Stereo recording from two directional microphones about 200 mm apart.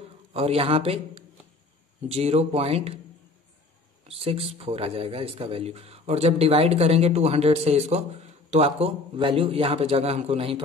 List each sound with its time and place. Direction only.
0.3 s a man's voice: 30° right (ahead or behind)
4.1 s a man's voice: 30° right (ahead or behind)